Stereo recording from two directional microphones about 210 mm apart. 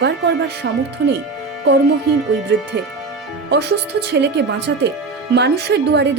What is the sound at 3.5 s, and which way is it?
Speech, 55° right (ahead or behind).